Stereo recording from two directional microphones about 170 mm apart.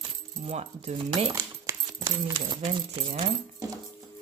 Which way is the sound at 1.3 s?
15° right (ahead or behind).